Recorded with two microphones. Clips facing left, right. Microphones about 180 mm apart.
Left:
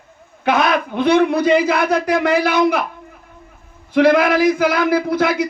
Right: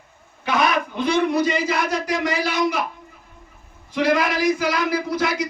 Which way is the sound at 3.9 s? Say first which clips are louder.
Left 7 dB; 55° left (ahead or behind).